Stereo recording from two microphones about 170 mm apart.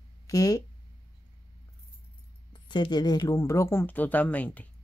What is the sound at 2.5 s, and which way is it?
Speech, 30° left (ahead or behind).